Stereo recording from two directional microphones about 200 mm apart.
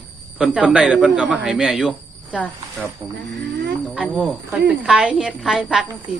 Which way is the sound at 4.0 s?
5° right (ahead or behind).